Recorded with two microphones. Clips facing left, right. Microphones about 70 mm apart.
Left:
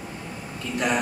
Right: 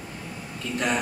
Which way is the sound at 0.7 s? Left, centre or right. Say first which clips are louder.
Left 2 dB; centre.